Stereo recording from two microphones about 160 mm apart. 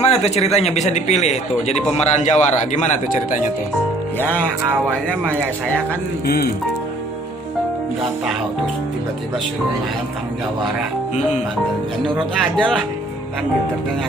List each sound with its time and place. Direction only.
0.0 s a man's voice: 40° left (ahead or behind)
4.2 s speech: 10° left (ahead or behind)
6.2 s speech: 75° left (ahead or behind)
12.0 s speech: centre (ahead or behind)